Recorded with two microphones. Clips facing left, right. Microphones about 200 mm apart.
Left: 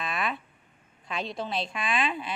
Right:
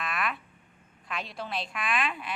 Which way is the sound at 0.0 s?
25° left (ahead or behind).